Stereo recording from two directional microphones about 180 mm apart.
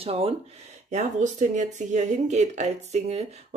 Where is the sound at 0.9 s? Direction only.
45° right (ahead or behind).